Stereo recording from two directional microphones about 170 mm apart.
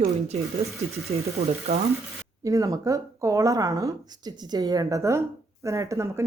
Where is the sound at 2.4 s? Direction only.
20° right (ahead or behind).